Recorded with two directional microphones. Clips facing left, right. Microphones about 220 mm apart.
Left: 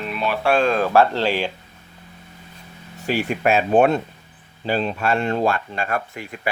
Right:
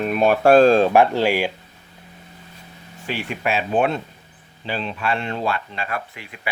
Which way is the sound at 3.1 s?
40° left (ahead or behind).